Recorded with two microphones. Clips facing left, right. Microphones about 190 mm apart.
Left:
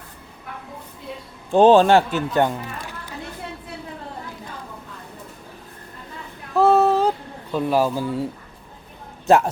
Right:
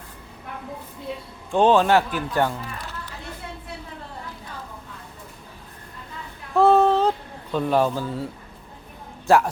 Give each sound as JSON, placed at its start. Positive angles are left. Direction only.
{"t": 1.5, "sound": "speech", "side_deg": 35}
{"t": 6.5, "sound": "a sound", "side_deg": 0}
{"t": 7.5, "sound": "speech", "side_deg": 5}